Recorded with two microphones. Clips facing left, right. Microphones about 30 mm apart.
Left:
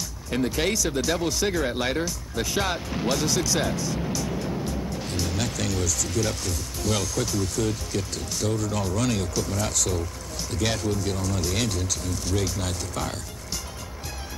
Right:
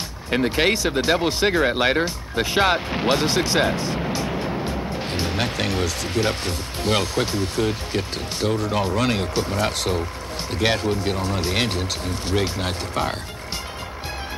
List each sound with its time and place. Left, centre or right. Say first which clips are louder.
0.3 s speech: right 5 dB; right